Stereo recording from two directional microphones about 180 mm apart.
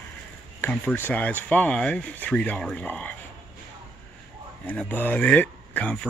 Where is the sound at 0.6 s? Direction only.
10° left (ahead or behind).